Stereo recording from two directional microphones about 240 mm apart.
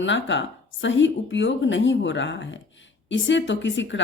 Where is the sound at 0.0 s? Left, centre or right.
Left.